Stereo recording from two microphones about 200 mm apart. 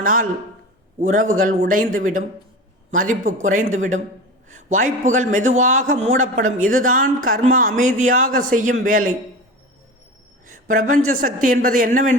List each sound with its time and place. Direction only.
0.0 s a man's voice: 45° right (ahead or behind)
10.5 s speech: 40° right (ahead or behind)